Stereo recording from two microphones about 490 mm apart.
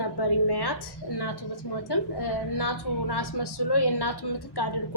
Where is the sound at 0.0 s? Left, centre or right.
Left.